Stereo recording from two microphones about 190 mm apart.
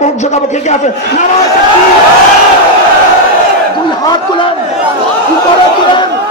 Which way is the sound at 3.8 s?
25° left (ahead or behind).